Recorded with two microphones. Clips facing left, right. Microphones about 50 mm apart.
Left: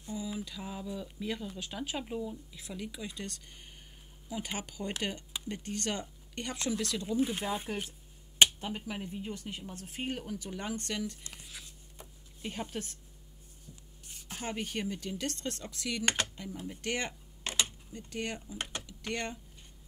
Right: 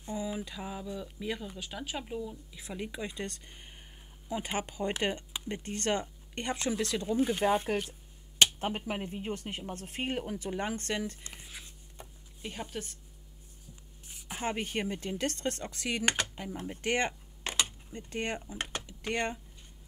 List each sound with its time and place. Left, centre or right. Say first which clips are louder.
0.0 s a sound: right 3 dB; right
0.8 s speech: right 1 dB; centre
1.2 s speech: even; centre
2.5 s speech: right 3 dB; right
7.4 s speech: right 7 dB; right
12.4 s speech: left 1 dB; centre
14.0 s a sound: right 3 dB; centre
14.4 s speech: right 3 dB; right
16.0 s speech: right 1 dB; right
18.9 s speech: right 6 dB; right